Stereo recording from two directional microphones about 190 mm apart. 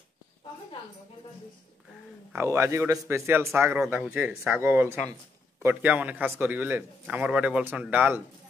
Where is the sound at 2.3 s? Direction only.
15° right (ahead or behind).